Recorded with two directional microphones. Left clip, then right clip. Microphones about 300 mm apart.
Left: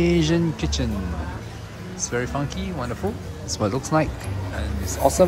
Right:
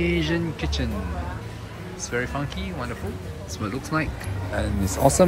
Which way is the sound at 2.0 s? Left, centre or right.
Centre.